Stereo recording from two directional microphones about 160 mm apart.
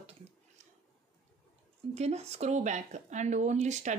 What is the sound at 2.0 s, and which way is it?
Speech, 40° right (ahead or behind).